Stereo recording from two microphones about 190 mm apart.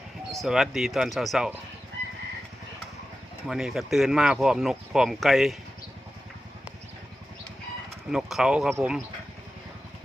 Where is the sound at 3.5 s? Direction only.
5° right (ahead or behind).